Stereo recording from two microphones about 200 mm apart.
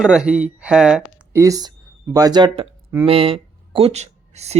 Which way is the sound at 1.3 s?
15° right (ahead or behind).